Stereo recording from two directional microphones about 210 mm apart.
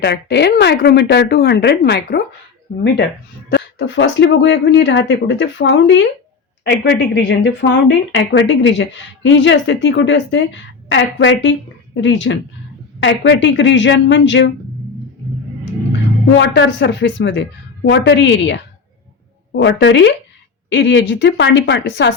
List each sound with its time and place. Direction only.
0.0 s speech: 55° left (ahead or behind)
3.5 s a woman's voice: 60° left (ahead or behind)
16.4 s a woman's voice: 60° left (ahead or behind)